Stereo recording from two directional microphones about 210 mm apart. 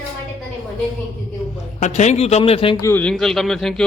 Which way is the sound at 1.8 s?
35° left (ahead or behind).